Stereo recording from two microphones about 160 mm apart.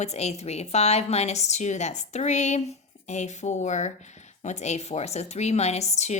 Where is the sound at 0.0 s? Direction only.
45° left (ahead or behind).